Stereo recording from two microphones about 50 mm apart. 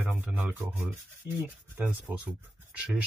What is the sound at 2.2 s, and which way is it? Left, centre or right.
Speech, right.